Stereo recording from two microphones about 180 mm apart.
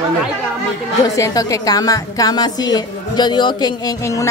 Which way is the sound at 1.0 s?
20° left (ahead or behind).